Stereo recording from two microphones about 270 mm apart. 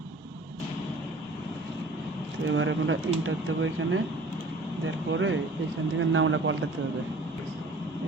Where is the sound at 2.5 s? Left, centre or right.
Right.